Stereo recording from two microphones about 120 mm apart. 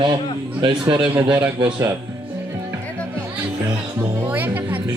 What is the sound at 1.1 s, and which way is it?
Speech, 10° right (ahead or behind).